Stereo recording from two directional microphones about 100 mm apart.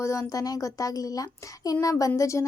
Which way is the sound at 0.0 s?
30° left (ahead or behind).